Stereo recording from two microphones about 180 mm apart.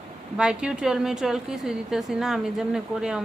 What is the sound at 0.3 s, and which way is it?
A woman's voice, 5° right (ahead or behind).